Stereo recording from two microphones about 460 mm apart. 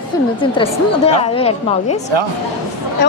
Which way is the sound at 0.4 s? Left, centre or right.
Centre.